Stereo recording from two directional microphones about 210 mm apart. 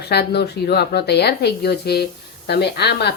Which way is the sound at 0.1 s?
50° left (ahead or behind).